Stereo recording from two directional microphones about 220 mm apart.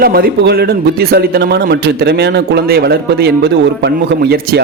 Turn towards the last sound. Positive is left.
turn(degrees=-45)  # may be behind; listen again after turning